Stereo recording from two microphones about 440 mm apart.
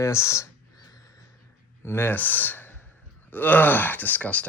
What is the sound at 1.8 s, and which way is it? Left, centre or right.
Speech, centre.